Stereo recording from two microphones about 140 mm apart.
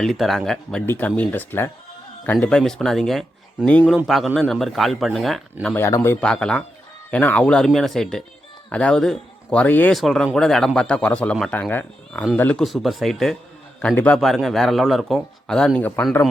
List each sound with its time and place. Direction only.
0.0 s a man's voice: centre (ahead or behind)
5.7 s a man's voice: 20° left (ahead or behind)
6.2 s a man's voice: 5° left (ahead or behind)
9.9 s a man's voice: centre (ahead or behind)
12.6 s a man's voice: centre (ahead or behind)